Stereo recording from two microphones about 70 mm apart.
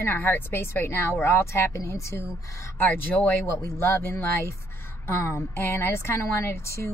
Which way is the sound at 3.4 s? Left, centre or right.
Left.